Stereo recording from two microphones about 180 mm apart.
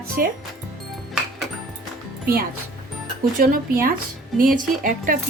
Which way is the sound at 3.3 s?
50° right (ahead or behind).